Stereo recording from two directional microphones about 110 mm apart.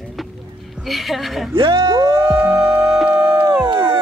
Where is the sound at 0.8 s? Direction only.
Centre (ahead or behind).